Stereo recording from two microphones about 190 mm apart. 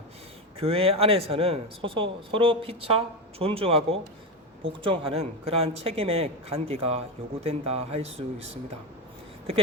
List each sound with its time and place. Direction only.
0.6 s speech: 30° right (ahead or behind)